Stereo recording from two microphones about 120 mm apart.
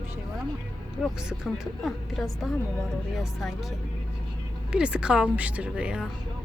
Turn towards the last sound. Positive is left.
turn(degrees=-10)  # may be behind; listen again after turning